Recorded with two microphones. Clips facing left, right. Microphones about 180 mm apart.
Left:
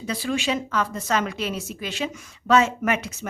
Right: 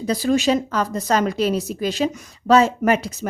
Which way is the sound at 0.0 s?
40° right (ahead or behind).